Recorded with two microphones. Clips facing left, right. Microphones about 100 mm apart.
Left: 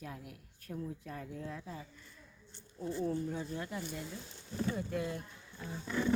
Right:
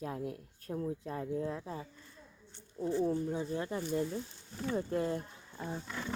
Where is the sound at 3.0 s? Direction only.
20° right (ahead or behind).